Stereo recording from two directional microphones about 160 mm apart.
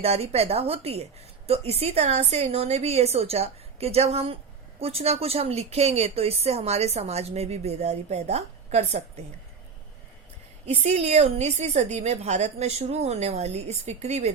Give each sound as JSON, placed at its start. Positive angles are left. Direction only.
{"t": 0.0, "sound": "speech", "side_deg": -40}
{"t": 10.8, "sound": "a woman's voice", "side_deg": -45}